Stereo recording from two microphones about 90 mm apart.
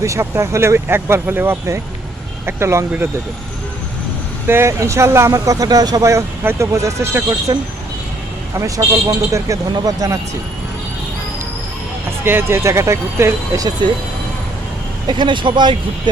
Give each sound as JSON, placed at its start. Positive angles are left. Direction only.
{"t": 0.0, "sound": "speech", "side_deg": -35}
{"t": 4.4, "sound": "speech", "side_deg": -30}
{"t": 5.3, "sound": "speech", "side_deg": -40}
{"t": 8.5, "sound": "speech", "side_deg": -35}
{"t": 12.2, "sound": "speech", "side_deg": -25}
{"t": 15.0, "sound": "speech", "side_deg": -60}